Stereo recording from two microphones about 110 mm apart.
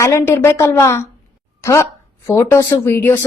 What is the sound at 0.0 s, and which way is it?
Speech, 25° left (ahead or behind).